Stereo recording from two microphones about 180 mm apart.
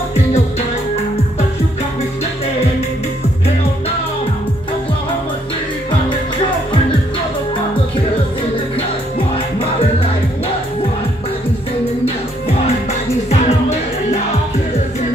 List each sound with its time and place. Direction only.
13.3 s music: 35° left (ahead or behind)